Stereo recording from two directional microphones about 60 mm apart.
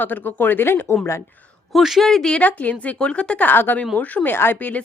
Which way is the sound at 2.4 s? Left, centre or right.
Left.